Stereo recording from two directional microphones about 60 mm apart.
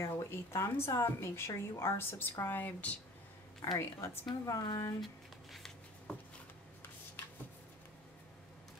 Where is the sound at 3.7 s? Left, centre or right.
Left.